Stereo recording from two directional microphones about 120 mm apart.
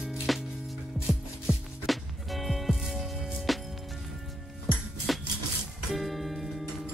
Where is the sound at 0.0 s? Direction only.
5° right (ahead or behind).